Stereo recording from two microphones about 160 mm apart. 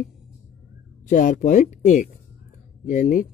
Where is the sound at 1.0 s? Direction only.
55° left (ahead or behind).